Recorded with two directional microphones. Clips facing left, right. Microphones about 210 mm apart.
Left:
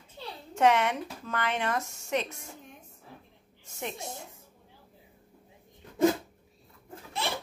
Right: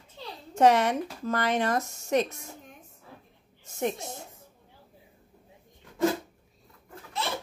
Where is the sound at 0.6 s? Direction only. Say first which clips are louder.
Right 3 dB; 40° right (ahead or behind).